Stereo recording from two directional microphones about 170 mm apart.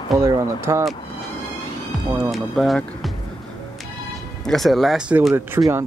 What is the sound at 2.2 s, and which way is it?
Speech, centre (ahead or behind).